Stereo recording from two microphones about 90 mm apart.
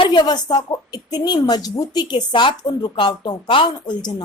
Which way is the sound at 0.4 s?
50° left (ahead or behind).